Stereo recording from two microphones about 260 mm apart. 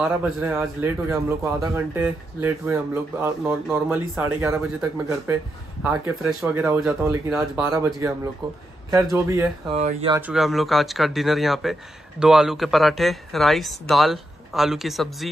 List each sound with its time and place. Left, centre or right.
0.0 s a man's voice: centre
9.1 s a man's voice: centre
9.8 s speech: right
10.1 s speech: centre